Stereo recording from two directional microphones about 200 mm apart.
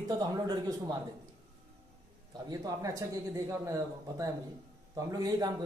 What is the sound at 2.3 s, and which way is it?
Speech, 20° right (ahead or behind).